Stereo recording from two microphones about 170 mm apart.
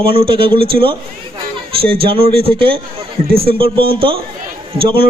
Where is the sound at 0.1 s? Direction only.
30° right (ahead or behind).